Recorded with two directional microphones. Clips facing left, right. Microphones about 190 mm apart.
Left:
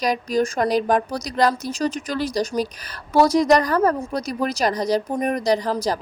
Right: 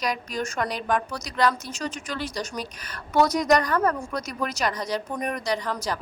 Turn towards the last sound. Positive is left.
turn(degrees=35)  # may be behind; listen again after turning